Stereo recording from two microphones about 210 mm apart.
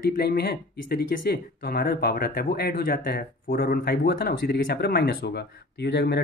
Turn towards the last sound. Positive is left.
turn(degrees=50)  # may be behind; listen again after turning